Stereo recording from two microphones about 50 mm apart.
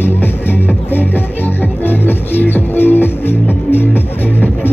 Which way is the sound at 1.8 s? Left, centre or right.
Left.